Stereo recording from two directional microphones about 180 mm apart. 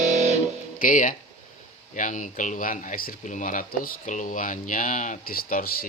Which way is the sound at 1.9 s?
45° left (ahead or behind).